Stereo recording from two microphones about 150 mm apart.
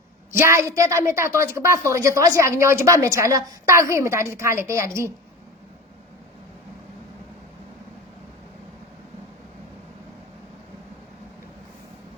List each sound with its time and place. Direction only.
0.3 s a woman's voice: 15° right (ahead or behind)